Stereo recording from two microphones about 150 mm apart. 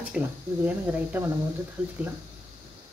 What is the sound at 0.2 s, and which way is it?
Speech, 5° right (ahead or behind).